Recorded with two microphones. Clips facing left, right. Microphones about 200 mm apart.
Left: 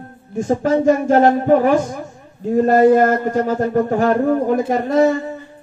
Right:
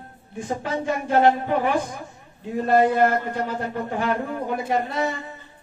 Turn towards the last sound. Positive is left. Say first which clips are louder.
# left 9 dB
turn(degrees=45)  # may be behind; listen again after turning